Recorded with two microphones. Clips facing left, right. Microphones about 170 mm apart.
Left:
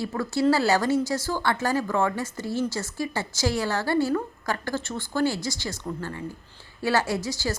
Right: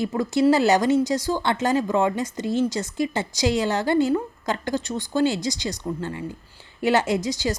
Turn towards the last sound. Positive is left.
turn(degrees=-20)  # may be behind; listen again after turning